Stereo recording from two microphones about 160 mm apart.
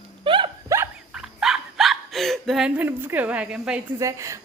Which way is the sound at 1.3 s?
5° right (ahead or behind).